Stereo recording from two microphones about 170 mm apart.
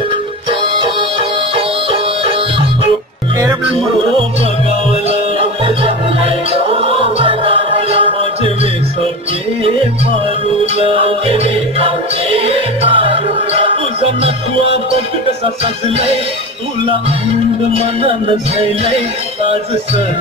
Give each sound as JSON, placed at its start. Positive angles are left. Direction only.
{"t": 0.5, "sound": "music", "side_deg": -30}
{"t": 5.0, "sound": "music", "side_deg": -35}
{"t": 10.6, "sound": "music", "side_deg": -35}
{"t": 18.0, "sound": "music", "side_deg": -30}